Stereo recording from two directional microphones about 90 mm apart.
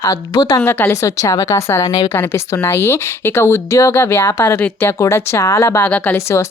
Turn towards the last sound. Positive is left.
turn(degrees=15)  # may be behind; listen again after turning